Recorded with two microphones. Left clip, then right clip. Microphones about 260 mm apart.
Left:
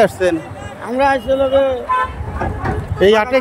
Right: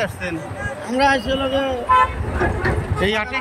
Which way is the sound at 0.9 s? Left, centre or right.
Centre.